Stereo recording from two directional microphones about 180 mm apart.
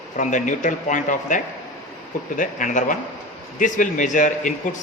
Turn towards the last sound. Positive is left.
turn(degrees=45)  # may be behind; listen again after turning